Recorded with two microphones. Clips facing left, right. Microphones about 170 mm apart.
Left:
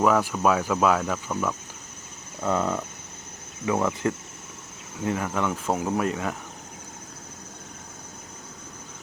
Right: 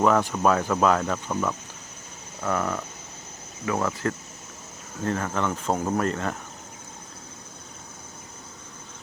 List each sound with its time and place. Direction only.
0.0 s speech: 5° left (ahead or behind)
2.4 s a sound: 20° left (ahead or behind)
3.7 s speech: 20° left (ahead or behind)